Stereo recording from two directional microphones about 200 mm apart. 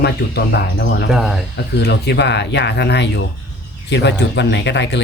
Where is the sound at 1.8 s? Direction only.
60° left (ahead or behind).